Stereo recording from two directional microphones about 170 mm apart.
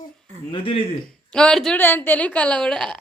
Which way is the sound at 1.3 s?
5° left (ahead or behind).